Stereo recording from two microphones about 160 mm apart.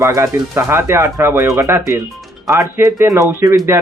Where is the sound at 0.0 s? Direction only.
20° right (ahead or behind).